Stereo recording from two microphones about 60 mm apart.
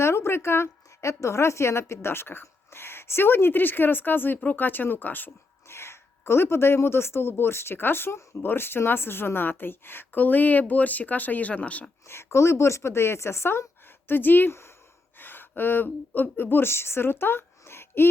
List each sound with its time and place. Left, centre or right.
0.0 s speech: left
0.9 s a woman's voice: left
5.6 s a woman's voice: left
12.0 s speech: left
14.5 s speech: left
15.2 s speech: left
17.6 s a sound: left